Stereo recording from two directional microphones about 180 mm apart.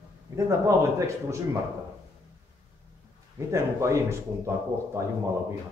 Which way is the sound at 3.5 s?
15° right (ahead or behind).